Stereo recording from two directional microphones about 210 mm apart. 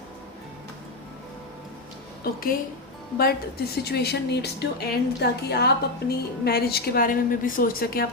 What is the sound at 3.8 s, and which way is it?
A woman's voice, 50° left (ahead or behind).